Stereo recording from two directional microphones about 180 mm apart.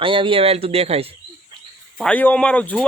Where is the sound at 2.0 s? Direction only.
10° left (ahead or behind).